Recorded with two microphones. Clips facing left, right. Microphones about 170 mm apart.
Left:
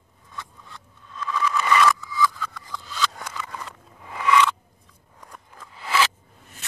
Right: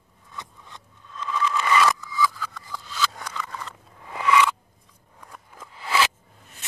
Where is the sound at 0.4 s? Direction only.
20° right (ahead or behind).